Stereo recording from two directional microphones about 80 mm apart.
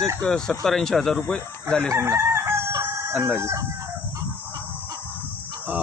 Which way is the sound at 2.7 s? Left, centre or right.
Right.